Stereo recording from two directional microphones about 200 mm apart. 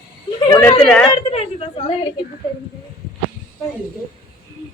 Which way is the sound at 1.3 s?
30° left (ahead or behind).